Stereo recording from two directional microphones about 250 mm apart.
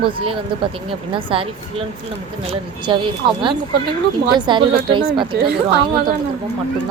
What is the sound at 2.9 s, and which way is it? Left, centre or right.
Speech, right.